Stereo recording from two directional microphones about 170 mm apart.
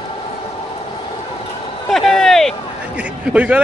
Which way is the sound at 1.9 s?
Centre (ahead or behind).